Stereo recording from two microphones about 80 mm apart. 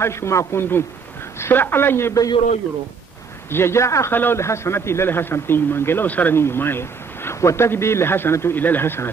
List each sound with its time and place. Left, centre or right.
0.0 s a man's voice: left
3.4 s a man's voice: left
4.1 s a man's voice: left